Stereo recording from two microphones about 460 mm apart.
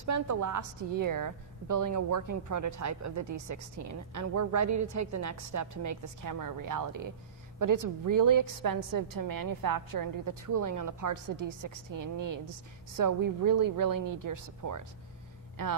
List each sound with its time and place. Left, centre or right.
0.0 s a woman's voice: right